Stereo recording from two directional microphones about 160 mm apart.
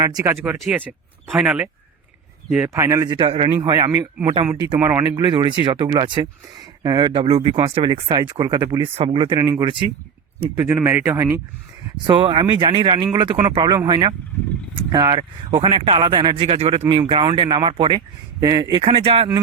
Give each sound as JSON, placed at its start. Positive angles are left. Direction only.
{"t": 0.0, "sound": "speech", "side_deg": -25}
{"t": 0.5, "sound": "speech", "side_deg": 0}
{"t": 2.6, "sound": "speech", "side_deg": -20}
{"t": 3.2, "sound": "speech", "side_deg": -35}
{"t": 3.9, "sound": "speech", "side_deg": -15}
{"t": 10.6, "sound": "speech", "side_deg": -15}
{"t": 12.0, "sound": "speech", "side_deg": -30}
{"t": 18.8, "sound": "speech", "side_deg": -35}